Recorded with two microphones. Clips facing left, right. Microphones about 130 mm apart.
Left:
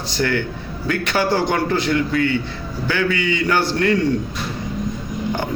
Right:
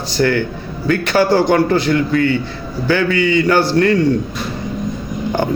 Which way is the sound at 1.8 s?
20° left (ahead or behind).